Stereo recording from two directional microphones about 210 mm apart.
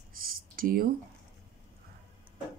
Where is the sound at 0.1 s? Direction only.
45° right (ahead or behind).